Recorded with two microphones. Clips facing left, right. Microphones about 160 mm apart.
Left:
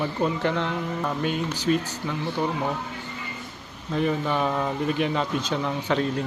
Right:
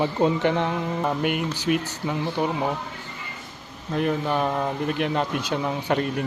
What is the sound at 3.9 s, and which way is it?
A man's voice, centre (ahead or behind).